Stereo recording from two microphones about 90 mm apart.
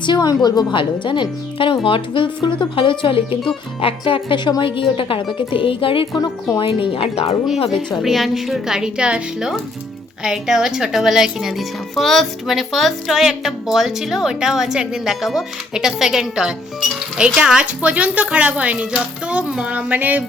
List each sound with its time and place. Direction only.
0.0 s a woman's voice: 55° left (ahead or behind); by 3.2 s 70° left (ahead or behind)
3.8 s a woman's voice: 85° left
8.0 s a woman's voice: centre (ahead or behind); by 20.2 s 20° right (ahead or behind)